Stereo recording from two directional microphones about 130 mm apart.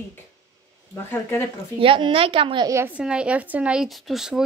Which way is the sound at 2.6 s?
20° right (ahead or behind).